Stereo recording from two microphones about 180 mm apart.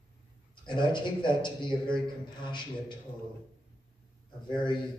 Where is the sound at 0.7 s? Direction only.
25° left (ahead or behind).